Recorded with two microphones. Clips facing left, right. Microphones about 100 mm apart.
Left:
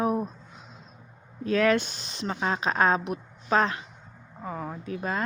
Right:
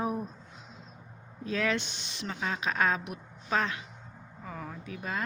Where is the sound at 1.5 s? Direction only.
60° left (ahead or behind).